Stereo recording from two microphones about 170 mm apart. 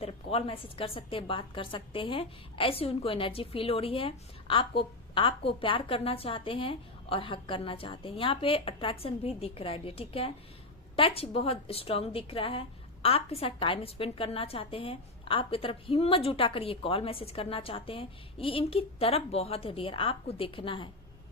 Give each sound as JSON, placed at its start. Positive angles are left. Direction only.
{"t": 0.0, "sound": "a woman's voice", "side_deg": 35}